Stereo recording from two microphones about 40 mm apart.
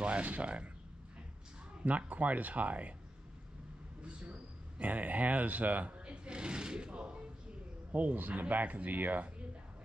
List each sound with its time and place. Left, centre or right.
0.0 s speech: right
1.8 s speech: right
4.0 s a sound: right
4.7 s speech: right
6.0 s a sound: right
7.9 s speech: right